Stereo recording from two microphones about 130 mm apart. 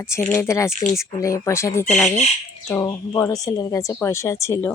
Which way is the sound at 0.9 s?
25° left (ahead or behind).